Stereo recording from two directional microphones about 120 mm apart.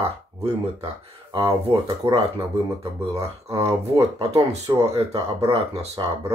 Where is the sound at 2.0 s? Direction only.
20° right (ahead or behind).